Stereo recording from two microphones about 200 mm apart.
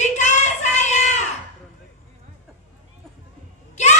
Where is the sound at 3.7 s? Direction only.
35° left (ahead or behind).